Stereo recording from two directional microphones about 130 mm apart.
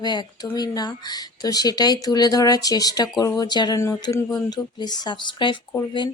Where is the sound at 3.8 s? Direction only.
20° left (ahead or behind).